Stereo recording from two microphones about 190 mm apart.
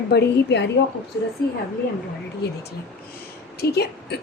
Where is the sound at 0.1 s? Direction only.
65° left (ahead or behind).